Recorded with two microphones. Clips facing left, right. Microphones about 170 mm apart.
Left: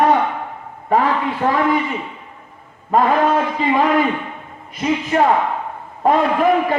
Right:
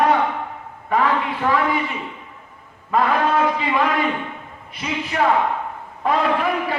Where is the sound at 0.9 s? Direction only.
40° left (ahead or behind).